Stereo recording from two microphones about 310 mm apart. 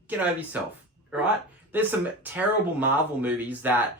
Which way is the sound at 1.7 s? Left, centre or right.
Centre.